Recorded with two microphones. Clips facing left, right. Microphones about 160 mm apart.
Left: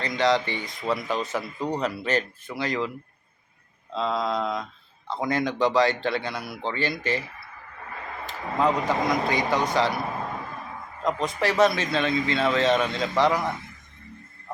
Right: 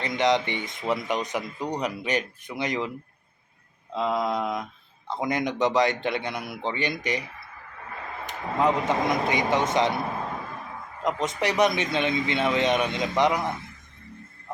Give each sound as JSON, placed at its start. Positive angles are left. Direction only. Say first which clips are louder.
{"t": 0.0, "sound": "speech", "louder": "even", "side_deg": -20}
{"t": 3.9, "sound": "speech", "louder": "even", "side_deg": -15}
{"t": 8.3, "sound": "speech", "louder": "even", "side_deg": -20}
{"t": 11.0, "sound": "speech", "louder": "left 1 dB", "side_deg": -20}